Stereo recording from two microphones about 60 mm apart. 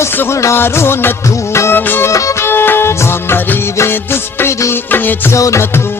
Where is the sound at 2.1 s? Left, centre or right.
Left.